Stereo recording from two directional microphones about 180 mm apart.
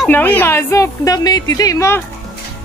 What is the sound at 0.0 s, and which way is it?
A woman's voice, 10° left (ahead or behind).